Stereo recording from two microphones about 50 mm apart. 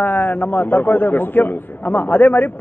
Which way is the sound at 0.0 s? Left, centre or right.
Left.